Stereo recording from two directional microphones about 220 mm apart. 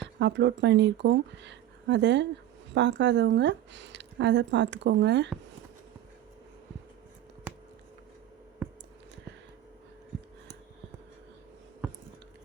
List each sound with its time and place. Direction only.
0.0 s speech: 55° right (ahead or behind)